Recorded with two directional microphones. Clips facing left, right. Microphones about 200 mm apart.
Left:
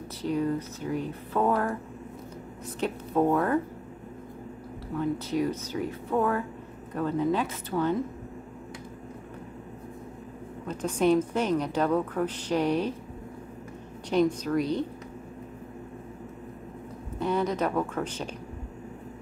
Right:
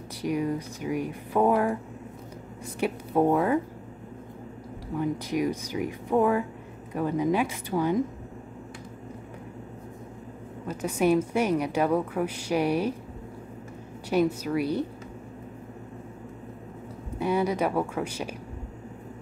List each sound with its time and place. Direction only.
0.2 s a woman's voice: 10° right (ahead or behind)
2.8 s a woman's voice: 10° right (ahead or behind)
4.9 s a woman's voice: 15° right (ahead or behind)
10.7 s a woman's voice: 10° right (ahead or behind)
14.0 s a woman's voice: 10° right (ahead or behind)
17.2 s a woman's voice: 10° right (ahead or behind)